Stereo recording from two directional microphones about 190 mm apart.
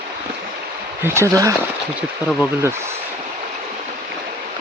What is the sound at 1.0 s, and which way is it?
Speech, 15° right (ahead or behind).